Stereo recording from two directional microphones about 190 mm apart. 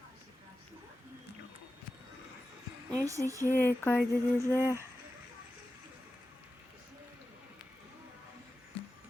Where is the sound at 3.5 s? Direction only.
10° left (ahead or behind).